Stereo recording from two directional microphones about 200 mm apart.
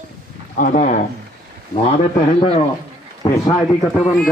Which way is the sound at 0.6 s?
40° left (ahead or behind).